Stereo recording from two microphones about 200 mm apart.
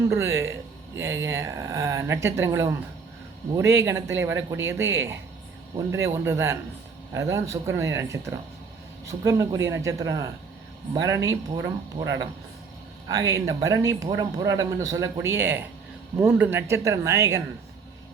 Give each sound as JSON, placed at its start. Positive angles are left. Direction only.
{"t": 0.1, "sound": "speech", "side_deg": -10}